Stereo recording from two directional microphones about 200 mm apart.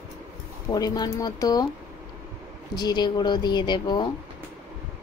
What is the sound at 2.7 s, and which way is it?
Speech, 20° left (ahead or behind).